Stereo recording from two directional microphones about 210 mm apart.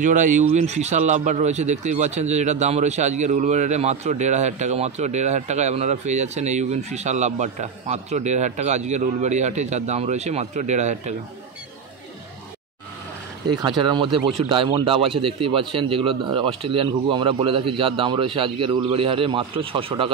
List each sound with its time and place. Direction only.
0.0 s a man's voice: 35° right (ahead or behind)
13.6 s speech: 20° right (ahead or behind)